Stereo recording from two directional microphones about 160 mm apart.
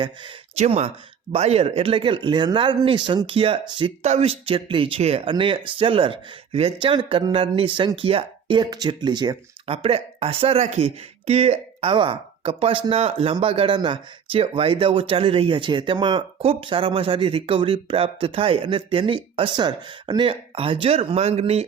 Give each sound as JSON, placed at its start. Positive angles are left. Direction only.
{"t": 0.5, "sound": "speech", "side_deg": -45}